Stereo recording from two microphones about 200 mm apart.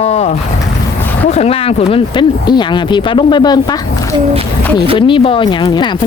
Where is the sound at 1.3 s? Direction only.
30° left (ahead or behind).